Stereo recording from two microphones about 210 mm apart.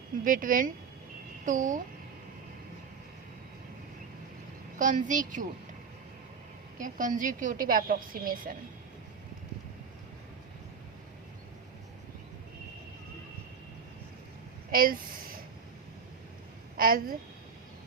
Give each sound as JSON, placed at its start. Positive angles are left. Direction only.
{"t": 0.3, "sound": "a woman's voice", "side_deg": -40}
{"t": 4.8, "sound": "a woman's voice", "side_deg": -35}
{"t": 6.7, "sound": "a woman's voice", "side_deg": -40}
{"t": 14.7, "sound": "speech", "side_deg": -45}
{"t": 16.7, "sound": "a woman's voice", "side_deg": -45}